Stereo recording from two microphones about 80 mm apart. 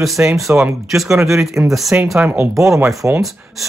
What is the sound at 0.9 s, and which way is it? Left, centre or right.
Speech, centre.